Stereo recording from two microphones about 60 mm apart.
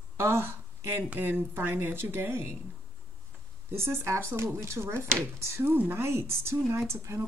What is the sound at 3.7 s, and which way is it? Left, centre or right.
Speech, right.